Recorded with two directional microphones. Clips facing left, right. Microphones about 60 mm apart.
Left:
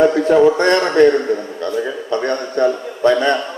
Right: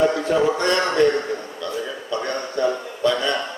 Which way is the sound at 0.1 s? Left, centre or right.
Left.